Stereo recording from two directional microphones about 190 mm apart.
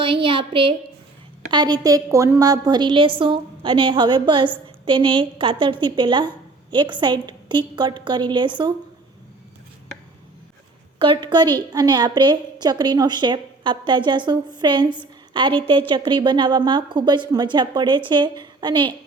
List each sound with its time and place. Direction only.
0.0 s a woman's voice: 25° right (ahead or behind)
11.0 s a woman's voice: 25° right (ahead or behind)